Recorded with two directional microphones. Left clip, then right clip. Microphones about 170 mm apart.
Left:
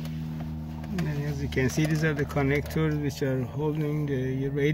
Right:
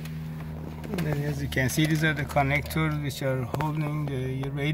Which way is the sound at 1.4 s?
40° right (ahead or behind).